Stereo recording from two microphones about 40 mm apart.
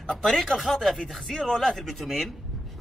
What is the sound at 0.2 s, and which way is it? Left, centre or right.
A man's voice, centre.